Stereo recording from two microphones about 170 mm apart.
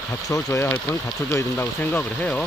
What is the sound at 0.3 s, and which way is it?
Speech, 15° left (ahead or behind).